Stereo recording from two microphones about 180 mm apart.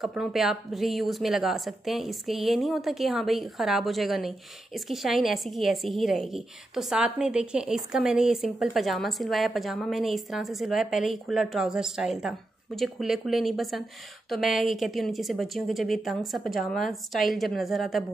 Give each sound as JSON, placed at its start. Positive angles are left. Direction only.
{"t": 0.0, "sound": "a woman's voice", "side_deg": 0}